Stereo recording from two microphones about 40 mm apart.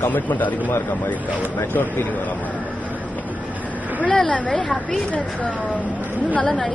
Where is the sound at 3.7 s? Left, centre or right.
Right.